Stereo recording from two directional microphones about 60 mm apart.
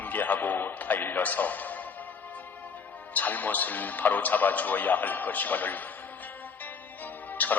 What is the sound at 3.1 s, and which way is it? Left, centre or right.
A man's voice, left.